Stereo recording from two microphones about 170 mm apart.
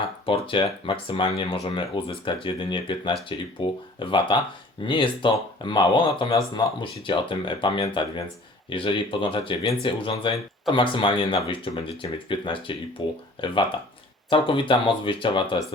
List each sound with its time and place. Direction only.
0.3 s speech: 30° left (ahead or behind)